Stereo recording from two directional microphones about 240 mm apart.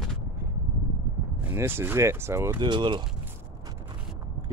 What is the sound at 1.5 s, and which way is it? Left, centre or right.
Speech, centre.